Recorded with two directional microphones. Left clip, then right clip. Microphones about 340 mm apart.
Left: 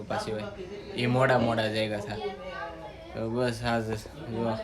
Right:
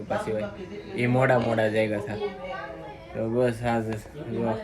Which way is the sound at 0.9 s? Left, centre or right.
Centre.